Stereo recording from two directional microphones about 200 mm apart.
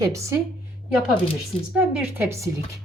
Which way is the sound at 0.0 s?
15° right (ahead or behind).